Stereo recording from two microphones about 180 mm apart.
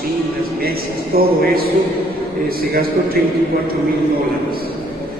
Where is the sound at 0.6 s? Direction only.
55° right (ahead or behind).